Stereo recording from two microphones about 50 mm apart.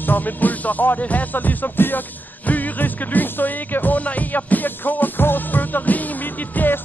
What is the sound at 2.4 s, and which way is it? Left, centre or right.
Speech, left.